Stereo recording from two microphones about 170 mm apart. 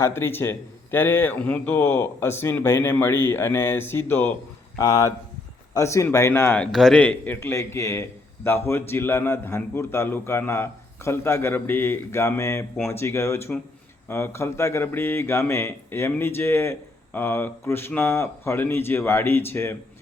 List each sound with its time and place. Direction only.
0.0 s speech: 15° left (ahead or behind)